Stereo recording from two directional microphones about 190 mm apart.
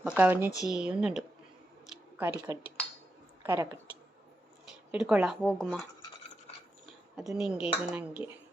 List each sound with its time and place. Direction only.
0.0 s speech: 5° right (ahead or behind)
4.9 s speech: 5° right (ahead or behind)
7.2 s speech: 5° right (ahead or behind)